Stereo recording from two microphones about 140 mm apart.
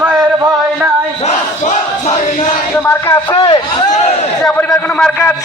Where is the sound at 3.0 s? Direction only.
25° left (ahead or behind).